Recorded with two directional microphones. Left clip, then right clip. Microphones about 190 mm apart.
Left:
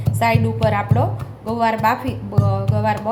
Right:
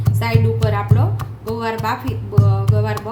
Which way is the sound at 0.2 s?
15° left (ahead or behind).